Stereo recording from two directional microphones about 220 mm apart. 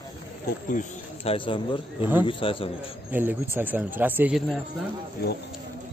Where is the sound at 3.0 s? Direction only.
10° right (ahead or behind).